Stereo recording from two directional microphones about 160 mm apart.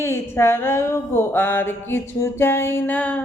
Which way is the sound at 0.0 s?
15° left (ahead or behind).